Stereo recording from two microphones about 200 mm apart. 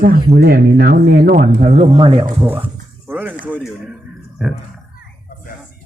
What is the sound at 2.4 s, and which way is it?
Speech, 10° right (ahead or behind).